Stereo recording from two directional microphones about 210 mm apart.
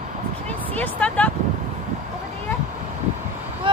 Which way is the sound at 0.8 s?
5° left (ahead or behind).